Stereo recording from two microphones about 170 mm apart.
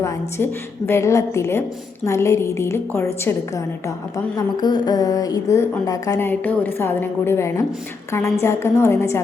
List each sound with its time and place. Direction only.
0.0 s a woman's voice: 15° left (ahead or behind)